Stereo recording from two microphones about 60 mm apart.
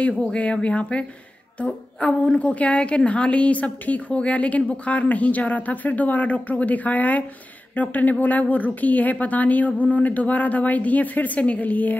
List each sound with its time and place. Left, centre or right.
0.2 s a woman's voice: centre